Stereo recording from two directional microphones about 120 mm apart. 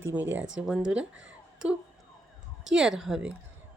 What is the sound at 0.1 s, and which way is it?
Speech, 10° right (ahead or behind).